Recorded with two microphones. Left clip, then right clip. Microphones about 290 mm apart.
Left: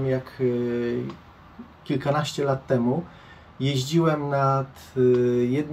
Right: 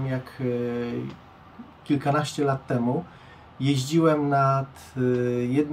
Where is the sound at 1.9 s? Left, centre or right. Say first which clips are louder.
Right 1 dB; centre.